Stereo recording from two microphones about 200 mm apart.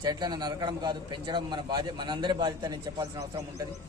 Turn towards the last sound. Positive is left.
turn(degrees=-15)  # may be behind; listen again after turning